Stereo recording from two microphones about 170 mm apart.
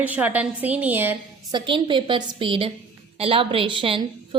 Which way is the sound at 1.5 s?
30° right (ahead or behind).